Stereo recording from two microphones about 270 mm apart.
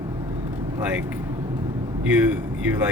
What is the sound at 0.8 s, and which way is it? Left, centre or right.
Speech, centre.